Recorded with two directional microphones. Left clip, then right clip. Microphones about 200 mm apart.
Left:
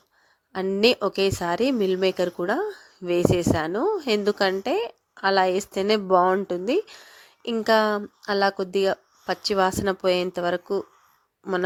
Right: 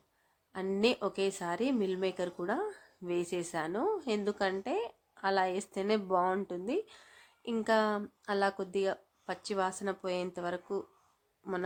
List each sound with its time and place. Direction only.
0.5 s a woman's voice: 35° left (ahead or behind)